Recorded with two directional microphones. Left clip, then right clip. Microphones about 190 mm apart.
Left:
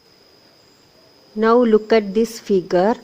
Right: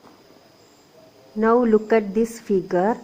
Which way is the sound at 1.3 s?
40° left (ahead or behind).